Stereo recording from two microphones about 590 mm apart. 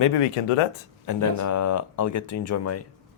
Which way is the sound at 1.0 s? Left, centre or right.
Left.